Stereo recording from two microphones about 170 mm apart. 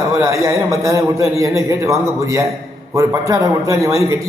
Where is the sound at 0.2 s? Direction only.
20° right (ahead or behind).